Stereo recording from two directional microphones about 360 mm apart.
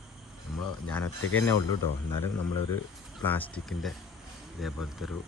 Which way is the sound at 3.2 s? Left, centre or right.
Centre.